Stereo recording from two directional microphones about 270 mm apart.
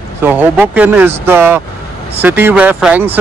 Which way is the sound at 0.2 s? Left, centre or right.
Centre.